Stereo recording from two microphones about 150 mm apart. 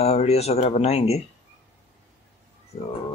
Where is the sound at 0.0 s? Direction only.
45° left (ahead or behind).